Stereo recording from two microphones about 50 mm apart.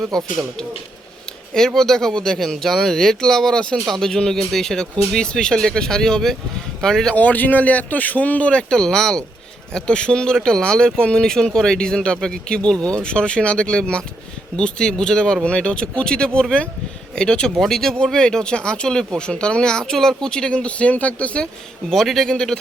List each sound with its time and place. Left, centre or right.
0.0 s speech: centre
7.2 s speech: left
8.7 s speech: centre
17.5 s speech: centre; by 21.4 s left
21.4 s speech: centre
22.3 s speech: centre